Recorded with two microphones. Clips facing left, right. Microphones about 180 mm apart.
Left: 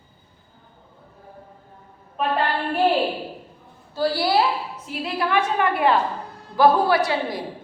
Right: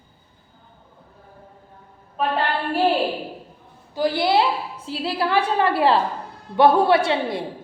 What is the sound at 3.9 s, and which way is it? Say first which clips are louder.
A woman's voice: right 1 dB; 20° right (ahead or behind).